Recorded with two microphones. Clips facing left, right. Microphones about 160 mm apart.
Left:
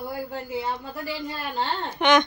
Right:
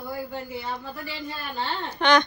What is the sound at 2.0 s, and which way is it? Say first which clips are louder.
Speech: left 1 dB; 20° left (ahead or behind).